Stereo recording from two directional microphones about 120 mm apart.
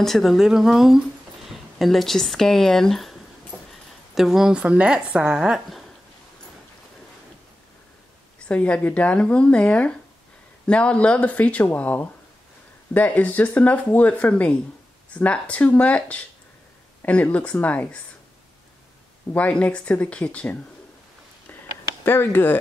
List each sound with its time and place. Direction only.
0.0 s a woman's voice: centre (ahead or behind)
8.5 s speech: 10° left (ahead or behind)
19.3 s speech: 10° left (ahead or behind)
22.0 s speech: 20° left (ahead or behind)